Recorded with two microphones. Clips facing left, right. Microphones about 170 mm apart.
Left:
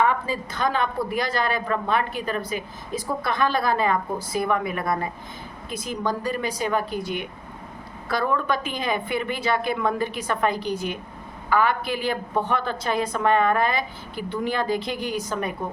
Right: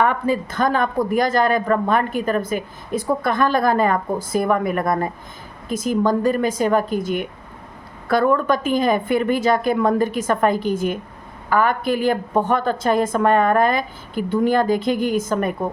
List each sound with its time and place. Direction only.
0.0 s speech: 55° right (ahead or behind)